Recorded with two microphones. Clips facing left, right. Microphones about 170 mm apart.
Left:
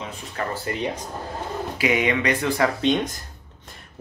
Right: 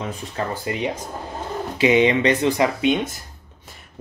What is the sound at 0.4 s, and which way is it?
Speech, 25° right (ahead or behind).